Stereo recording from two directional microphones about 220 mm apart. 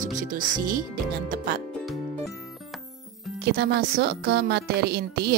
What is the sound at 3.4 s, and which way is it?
A woman's voice, 45° right (ahead or behind).